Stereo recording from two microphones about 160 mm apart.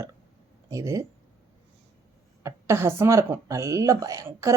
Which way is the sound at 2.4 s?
15° right (ahead or behind).